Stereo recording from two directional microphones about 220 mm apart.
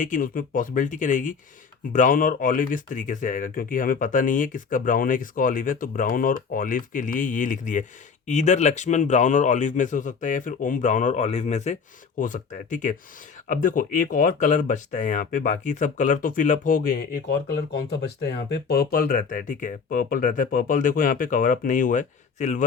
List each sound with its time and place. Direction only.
0.0 s speech: 40° left (ahead or behind)